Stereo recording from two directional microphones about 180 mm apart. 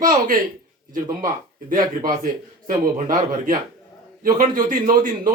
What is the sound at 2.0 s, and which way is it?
A man's voice, 50° right (ahead or behind).